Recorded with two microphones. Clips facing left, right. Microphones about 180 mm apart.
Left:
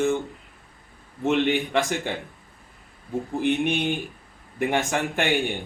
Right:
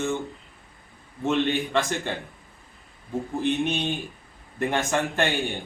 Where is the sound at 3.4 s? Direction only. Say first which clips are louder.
Left 2 dB; 15° left (ahead or behind).